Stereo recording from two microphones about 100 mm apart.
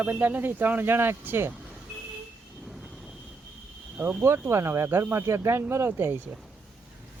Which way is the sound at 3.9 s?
15° right (ahead or behind).